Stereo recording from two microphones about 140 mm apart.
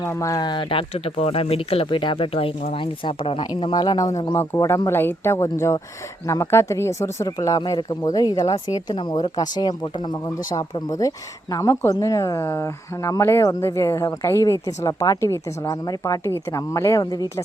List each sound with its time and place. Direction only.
0.0 s speech: 20° left (ahead or behind)